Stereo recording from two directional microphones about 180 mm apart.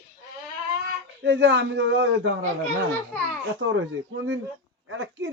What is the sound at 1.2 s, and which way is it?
A man's voice, 70° right (ahead or behind).